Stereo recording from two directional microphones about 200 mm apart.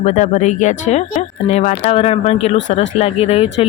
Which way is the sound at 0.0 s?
35° left (ahead or behind).